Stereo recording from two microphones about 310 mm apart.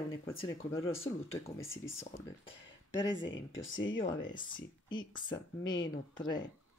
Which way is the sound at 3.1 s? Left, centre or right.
Left.